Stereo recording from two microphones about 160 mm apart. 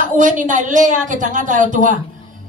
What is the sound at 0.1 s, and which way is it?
A woman's voice, 55° right (ahead or behind).